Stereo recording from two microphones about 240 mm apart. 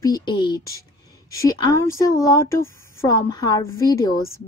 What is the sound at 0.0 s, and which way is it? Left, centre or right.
A woman's voice, centre.